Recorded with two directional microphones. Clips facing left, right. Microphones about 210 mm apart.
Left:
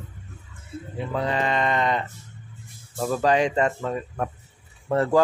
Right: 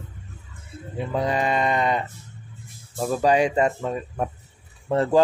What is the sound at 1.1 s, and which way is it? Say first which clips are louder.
Speech: right 2 dB; 15° right (ahead or behind).